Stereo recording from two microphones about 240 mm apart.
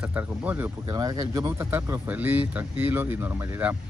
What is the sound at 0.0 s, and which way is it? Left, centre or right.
A man's voice, centre.